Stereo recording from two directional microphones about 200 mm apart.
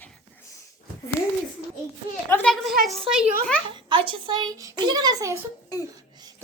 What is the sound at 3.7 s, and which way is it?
A child's voice, 25° right (ahead or behind).